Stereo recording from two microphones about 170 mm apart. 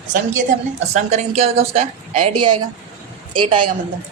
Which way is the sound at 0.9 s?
40° right (ahead or behind).